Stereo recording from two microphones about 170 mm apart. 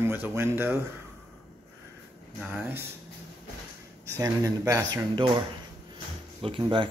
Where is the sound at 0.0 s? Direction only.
15° right (ahead or behind).